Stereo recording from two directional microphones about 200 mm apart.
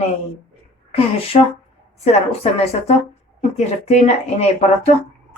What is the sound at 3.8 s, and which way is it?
Speech, 35° left (ahead or behind).